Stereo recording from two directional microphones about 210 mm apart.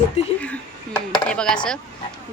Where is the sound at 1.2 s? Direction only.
5° left (ahead or behind).